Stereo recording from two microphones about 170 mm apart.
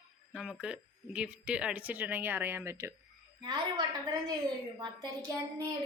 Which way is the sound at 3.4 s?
25° right (ahead or behind).